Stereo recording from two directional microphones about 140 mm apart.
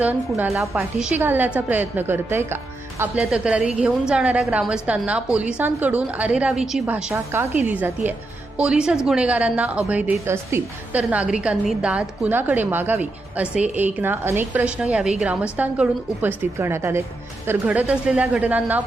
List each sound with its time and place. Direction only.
0.0 s a woman's voice: 15° right (ahead or behind)
0.5 s a woman's voice: centre (ahead or behind)